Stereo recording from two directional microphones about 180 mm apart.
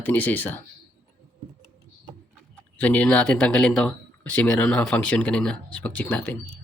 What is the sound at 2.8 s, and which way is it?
Speech, 10° left (ahead or behind).